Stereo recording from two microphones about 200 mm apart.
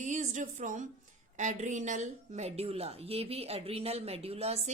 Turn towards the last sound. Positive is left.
turn(degrees=-30)  # may be behind; listen again after turning